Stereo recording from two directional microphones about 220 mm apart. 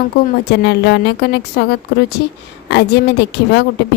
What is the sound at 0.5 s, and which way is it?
Speech, 50° left (ahead or behind).